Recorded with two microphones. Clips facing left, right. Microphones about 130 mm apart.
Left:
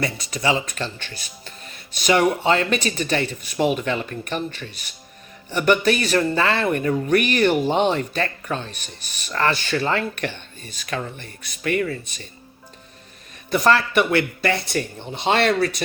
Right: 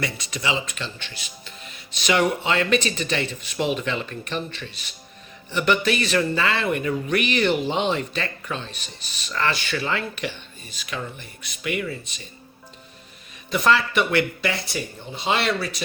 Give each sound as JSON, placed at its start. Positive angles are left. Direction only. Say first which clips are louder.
{"t": 0.0, "sound": "speech", "louder": "left 4 dB", "side_deg": 40}
{"t": 14.4, "sound": "speech", "louder": "left 4 dB", "side_deg": 55}